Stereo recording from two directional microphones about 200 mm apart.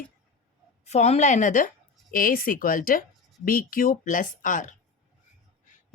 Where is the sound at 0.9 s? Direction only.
35° left (ahead or behind).